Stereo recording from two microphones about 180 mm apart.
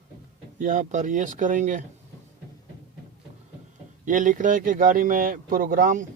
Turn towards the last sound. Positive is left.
turn(degrees=-50)  # may be behind; listen again after turning